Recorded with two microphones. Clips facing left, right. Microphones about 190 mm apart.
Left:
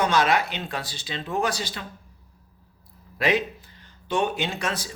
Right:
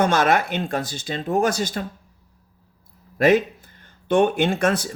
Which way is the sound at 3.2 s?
50° right (ahead or behind).